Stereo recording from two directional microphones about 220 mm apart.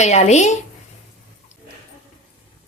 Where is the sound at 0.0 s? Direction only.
30° left (ahead or behind).